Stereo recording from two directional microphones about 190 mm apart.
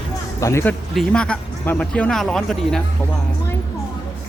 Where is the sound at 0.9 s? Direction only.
5° left (ahead or behind).